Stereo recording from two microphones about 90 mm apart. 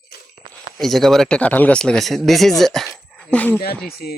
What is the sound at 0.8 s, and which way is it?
Speech, centre (ahead or behind).